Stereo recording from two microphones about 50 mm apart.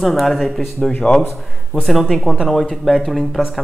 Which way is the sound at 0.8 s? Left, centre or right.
Centre.